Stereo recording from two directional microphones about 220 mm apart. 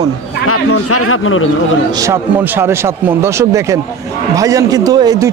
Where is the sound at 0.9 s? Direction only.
70° left (ahead or behind).